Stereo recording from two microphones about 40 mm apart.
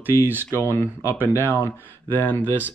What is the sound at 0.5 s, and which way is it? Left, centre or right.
Speech, right.